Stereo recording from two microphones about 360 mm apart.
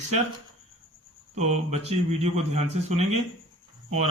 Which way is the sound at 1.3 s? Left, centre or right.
Centre.